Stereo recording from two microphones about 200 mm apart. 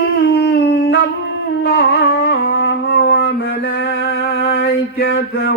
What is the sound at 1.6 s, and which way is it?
Music, 60° left (ahead or behind).